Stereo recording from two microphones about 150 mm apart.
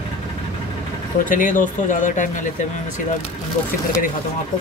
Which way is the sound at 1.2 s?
60° left (ahead or behind).